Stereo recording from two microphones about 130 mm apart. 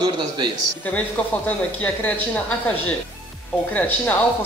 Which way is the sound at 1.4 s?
10° left (ahead or behind).